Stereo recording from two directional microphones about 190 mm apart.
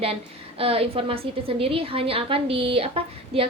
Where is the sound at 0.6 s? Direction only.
30° right (ahead or behind).